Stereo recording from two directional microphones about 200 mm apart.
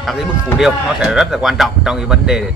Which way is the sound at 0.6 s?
5° right (ahead or behind).